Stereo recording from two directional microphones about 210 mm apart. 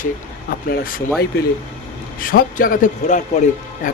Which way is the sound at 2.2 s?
40° left (ahead or behind).